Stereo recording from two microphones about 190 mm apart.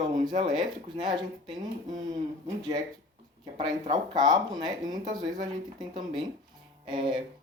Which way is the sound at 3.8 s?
20° right (ahead or behind).